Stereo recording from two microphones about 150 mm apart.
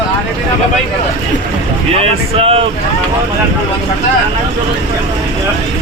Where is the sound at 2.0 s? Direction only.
40° right (ahead or behind).